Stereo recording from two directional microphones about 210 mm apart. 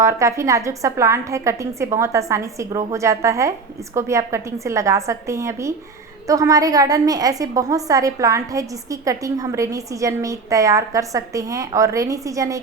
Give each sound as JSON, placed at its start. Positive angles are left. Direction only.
{"t": 0.0, "sound": "a woman's voice", "side_deg": -15}